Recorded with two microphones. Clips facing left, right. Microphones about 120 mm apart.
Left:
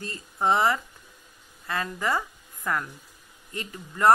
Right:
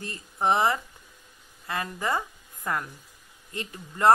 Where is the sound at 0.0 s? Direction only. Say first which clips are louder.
Even; 20° right (ahead or behind).